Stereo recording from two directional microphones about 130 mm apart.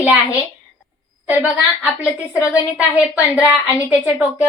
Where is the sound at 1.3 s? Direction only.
15° right (ahead or behind).